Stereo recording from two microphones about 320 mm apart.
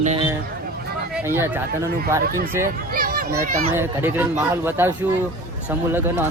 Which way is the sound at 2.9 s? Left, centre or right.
Right.